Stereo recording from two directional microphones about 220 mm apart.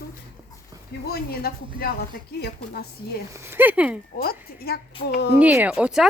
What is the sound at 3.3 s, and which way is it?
Speech, 10° right (ahead or behind).